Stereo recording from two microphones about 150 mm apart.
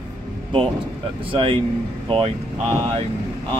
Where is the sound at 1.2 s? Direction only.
35° right (ahead or behind).